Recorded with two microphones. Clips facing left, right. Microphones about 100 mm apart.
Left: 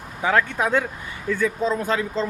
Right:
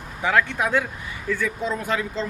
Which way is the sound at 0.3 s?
35° left (ahead or behind).